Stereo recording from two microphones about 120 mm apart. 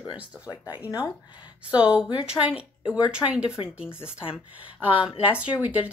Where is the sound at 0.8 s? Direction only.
30° left (ahead or behind).